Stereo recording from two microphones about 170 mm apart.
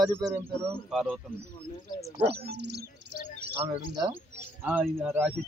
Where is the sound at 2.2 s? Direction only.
80° right.